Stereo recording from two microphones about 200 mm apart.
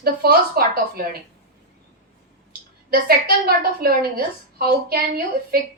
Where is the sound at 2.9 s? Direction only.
50° right (ahead or behind).